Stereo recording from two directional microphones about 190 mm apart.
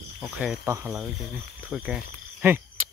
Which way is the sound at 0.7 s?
15° right (ahead or behind).